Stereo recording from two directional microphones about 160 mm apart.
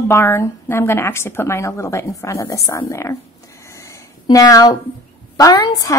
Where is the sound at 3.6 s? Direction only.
20° left (ahead or behind).